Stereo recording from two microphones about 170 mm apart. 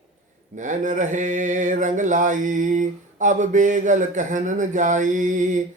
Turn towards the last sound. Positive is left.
turn(degrees=-50)  # may be behind; listen again after turning